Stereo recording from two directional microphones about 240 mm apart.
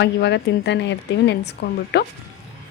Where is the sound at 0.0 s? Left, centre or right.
Left.